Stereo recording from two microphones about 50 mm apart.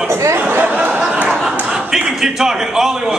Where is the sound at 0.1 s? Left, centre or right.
Right.